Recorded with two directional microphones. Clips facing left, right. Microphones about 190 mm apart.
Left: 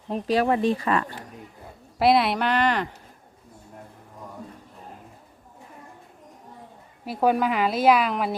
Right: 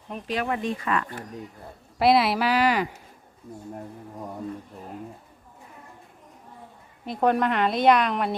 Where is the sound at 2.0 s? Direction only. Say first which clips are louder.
Even; centre (ahead or behind).